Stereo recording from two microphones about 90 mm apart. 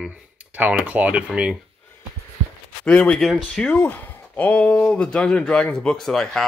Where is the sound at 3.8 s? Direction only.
15° left (ahead or behind).